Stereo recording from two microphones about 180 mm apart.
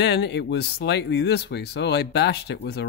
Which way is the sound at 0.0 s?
75° left (ahead or behind).